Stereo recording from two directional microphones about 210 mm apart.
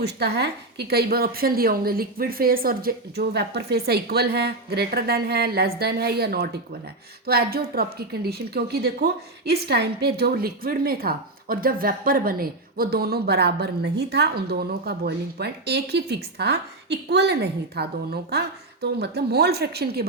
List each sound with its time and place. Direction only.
0.0 s a woman's voice: 50° right (ahead or behind)